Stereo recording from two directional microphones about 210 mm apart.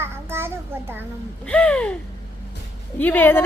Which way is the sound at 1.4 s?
5° left (ahead or behind).